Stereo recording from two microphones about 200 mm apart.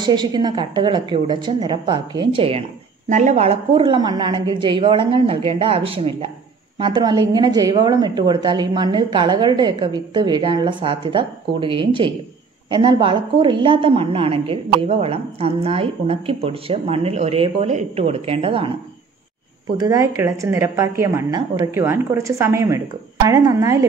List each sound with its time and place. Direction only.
0.0 s a woman's voice: 20° right (ahead or behind)
19.8 s a woman's voice: 15° right (ahead or behind)